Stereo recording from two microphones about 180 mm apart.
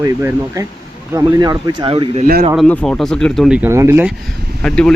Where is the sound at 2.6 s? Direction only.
5° left (ahead or behind); by 4.1 s 15° right (ahead or behind).